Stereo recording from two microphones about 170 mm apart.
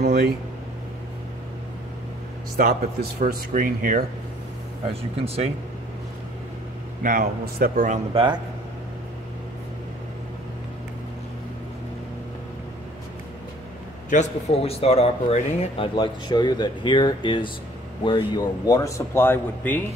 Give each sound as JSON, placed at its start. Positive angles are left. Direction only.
{"t": 0.0, "sound": "a sound", "side_deg": -65}
{"t": 2.5, "sound": "speech", "side_deg": -60}
{"t": 4.8, "sound": "speech", "side_deg": -35}
{"t": 7.0, "sound": "a man's voice", "side_deg": -55}
{"t": 8.1, "sound": "speech", "side_deg": -30}
{"t": 14.1, "sound": "speech", "side_deg": 40}